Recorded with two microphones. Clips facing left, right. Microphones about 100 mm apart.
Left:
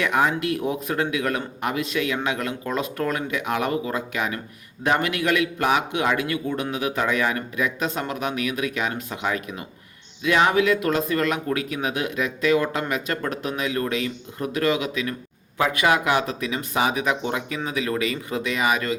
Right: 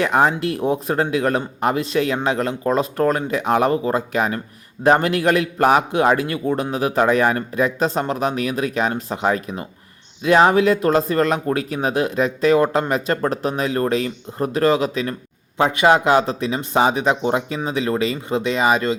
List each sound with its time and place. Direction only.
0.0 s a man's voice: 35° right (ahead or behind)